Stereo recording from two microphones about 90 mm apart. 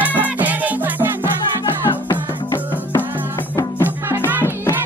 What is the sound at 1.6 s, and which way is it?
Music, 65° left (ahead or behind).